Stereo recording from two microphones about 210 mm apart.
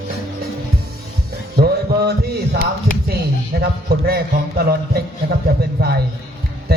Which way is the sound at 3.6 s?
45° right (ahead or behind).